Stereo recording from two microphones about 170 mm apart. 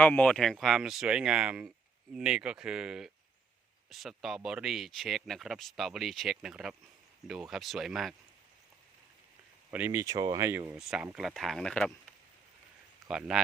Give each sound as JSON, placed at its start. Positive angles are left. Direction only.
{"t": 0.0, "sound": "speech", "side_deg": 10}
{"t": 9.7, "sound": "speech", "side_deg": -10}
{"t": 10.8, "sound": "speech", "side_deg": -5}
{"t": 13.1, "sound": "speech", "side_deg": -5}